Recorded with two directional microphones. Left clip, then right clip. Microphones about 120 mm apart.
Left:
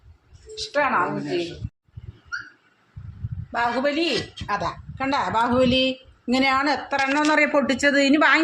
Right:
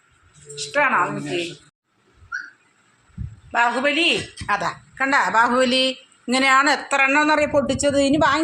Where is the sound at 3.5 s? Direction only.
15° right (ahead or behind).